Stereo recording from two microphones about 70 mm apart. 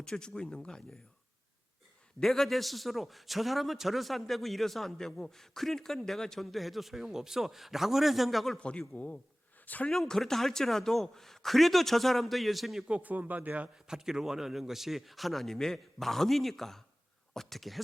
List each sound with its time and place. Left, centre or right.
0.0 s speech: centre
2.2 s a man's voice: centre
8.5 s speech: centre
9.9 s a man's voice: centre
12.9 s speech: right
13.7 s a man's voice: centre